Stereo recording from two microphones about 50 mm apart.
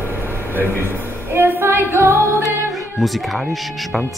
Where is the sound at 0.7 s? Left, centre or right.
Right.